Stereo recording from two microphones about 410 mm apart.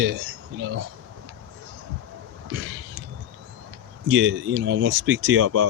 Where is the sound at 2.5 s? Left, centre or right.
Right.